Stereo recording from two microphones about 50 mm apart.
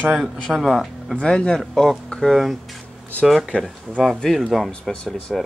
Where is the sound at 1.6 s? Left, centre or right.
Centre.